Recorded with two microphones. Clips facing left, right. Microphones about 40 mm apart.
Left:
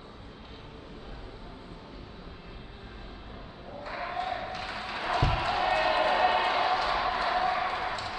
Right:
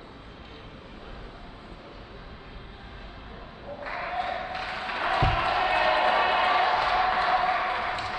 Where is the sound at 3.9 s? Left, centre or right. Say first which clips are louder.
Right 3 dB; right.